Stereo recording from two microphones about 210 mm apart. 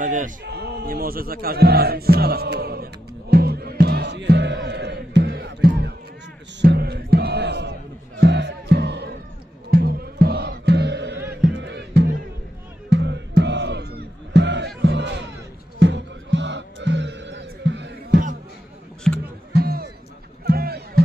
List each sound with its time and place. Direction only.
0.4 s music: 50° right (ahead or behind)
19.5 s music: 45° right (ahead or behind)